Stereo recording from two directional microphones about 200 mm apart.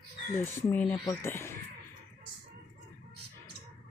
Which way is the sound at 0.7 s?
10° left (ahead or behind).